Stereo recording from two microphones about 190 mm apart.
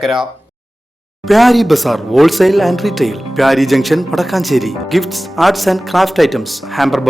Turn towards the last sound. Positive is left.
turn(degrees=0)  # may be behind; listen again after turning